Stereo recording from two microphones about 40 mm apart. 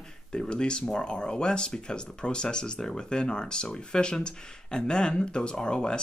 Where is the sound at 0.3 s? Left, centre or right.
Left.